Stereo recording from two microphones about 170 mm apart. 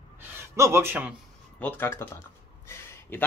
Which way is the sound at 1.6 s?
15° left (ahead or behind).